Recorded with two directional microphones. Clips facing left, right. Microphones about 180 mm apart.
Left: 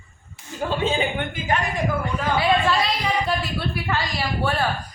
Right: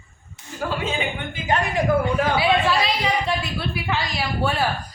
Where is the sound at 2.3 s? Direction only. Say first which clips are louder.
Left 4 dB; 5° right (ahead or behind).